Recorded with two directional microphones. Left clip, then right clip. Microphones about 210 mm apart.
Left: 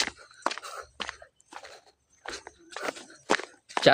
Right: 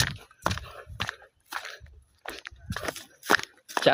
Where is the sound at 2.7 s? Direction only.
55° right (ahead or behind).